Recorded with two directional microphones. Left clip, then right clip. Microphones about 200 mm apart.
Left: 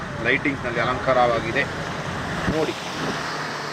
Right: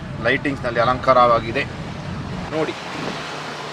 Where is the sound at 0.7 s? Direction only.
35° right (ahead or behind).